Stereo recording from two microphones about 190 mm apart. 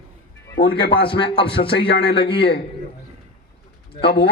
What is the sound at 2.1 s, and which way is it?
Speech, 25° left (ahead or behind).